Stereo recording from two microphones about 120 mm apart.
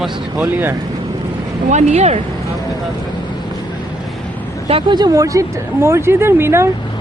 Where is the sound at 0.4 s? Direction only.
15° right (ahead or behind).